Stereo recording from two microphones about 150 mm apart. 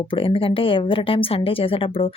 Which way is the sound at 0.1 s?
35° left (ahead or behind).